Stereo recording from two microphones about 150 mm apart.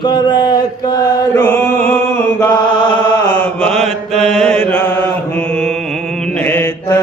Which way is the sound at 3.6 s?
5° left (ahead or behind).